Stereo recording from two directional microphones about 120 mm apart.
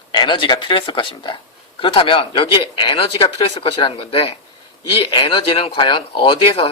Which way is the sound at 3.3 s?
50° left (ahead or behind).